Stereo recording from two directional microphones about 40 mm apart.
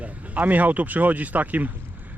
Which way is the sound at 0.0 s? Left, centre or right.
Right.